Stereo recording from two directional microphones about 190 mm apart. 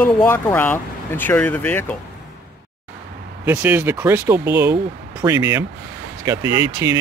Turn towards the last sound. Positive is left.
turn(degrees=-15)  # may be behind; listen again after turning